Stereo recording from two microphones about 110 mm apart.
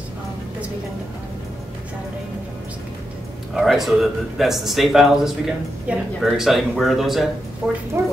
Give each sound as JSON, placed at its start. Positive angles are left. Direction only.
{"t": 3.5, "sound": "speech", "side_deg": -5}
{"t": 8.0, "sound": "speech", "side_deg": -25}